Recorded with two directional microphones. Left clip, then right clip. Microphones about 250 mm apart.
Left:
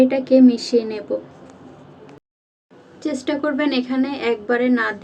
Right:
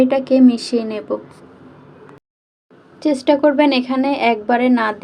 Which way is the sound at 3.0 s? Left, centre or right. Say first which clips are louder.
Right 9 dB; right.